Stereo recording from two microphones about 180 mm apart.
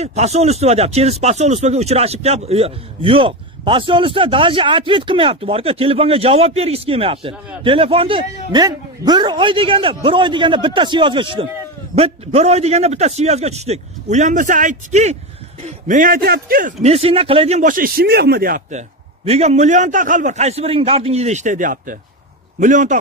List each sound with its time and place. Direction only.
0.0 s a man's voice: 35° right (ahead or behind)
15.9 s a man's voice: 55° right (ahead or behind)
16.8 s a man's voice: 35° right (ahead or behind)